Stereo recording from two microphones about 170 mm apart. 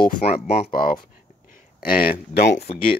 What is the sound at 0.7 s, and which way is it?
Speech, 55° left (ahead or behind).